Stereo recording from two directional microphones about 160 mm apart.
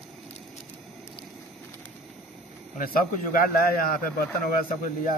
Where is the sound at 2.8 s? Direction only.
65° left (ahead or behind).